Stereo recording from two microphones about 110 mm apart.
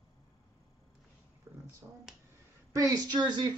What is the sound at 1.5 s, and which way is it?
Finger snapping, 25° right (ahead or behind).